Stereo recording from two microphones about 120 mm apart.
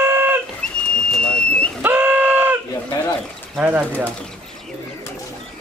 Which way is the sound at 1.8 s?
15° right (ahead or behind).